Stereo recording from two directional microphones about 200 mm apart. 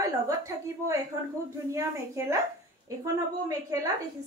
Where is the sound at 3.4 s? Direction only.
15° right (ahead or behind).